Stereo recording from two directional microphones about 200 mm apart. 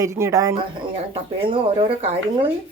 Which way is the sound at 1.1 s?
30° right (ahead or behind).